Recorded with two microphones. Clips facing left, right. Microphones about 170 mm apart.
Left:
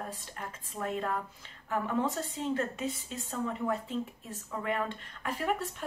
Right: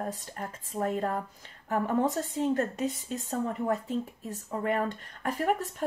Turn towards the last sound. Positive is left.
turn(degrees=-45)  # may be behind; listen again after turning